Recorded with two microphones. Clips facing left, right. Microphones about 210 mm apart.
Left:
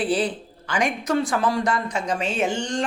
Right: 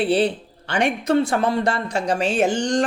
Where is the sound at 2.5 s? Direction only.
90° right.